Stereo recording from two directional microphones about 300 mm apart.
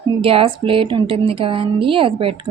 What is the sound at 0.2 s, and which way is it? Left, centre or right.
A woman's voice, centre.